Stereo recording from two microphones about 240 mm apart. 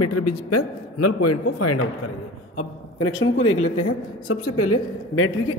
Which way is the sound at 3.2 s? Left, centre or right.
Left.